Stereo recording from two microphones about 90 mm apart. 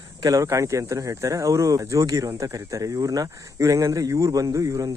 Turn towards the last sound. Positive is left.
turn(degrees=-40)  # may be behind; listen again after turning